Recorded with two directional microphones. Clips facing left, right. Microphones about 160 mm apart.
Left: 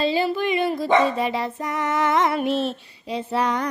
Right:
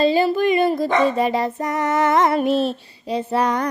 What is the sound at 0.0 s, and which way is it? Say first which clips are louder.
Dog: right 5 dB; 45° right (ahead or behind).